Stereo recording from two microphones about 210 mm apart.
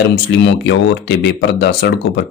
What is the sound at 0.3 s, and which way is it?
Speech, 55° left (ahead or behind).